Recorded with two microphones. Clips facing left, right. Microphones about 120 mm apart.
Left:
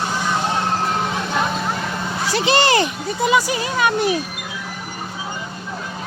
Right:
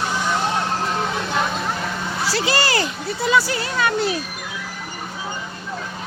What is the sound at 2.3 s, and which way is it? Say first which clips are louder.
Speech: left 5 dB; 20° left (ahead or behind).